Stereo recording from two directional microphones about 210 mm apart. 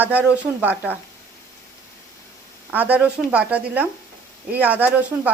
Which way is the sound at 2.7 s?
10° right (ahead or behind).